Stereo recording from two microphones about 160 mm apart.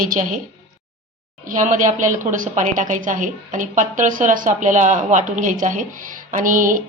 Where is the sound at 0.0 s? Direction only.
60° right (ahead or behind).